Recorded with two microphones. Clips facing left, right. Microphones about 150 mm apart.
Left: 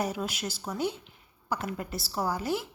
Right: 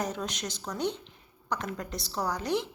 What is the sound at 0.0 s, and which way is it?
A woman's voice, 5° left (ahead or behind).